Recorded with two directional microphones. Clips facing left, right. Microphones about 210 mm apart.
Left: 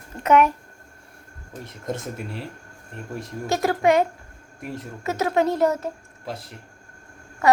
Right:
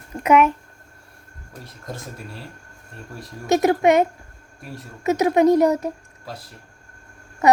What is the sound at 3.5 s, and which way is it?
Speech, 20° right (ahead or behind).